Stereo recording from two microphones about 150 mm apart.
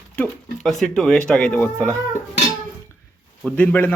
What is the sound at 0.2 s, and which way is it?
Speech, centre (ahead or behind).